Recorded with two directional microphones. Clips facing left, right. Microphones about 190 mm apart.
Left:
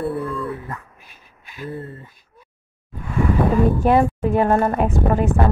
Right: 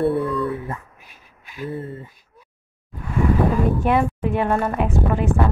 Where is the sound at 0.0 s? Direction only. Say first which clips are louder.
Right 4 dB; centre (ahead or behind).